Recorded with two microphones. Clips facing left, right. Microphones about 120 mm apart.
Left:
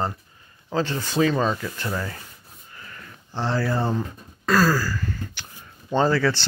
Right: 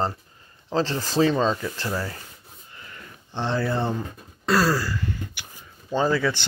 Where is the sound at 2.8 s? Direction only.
25° right (ahead or behind).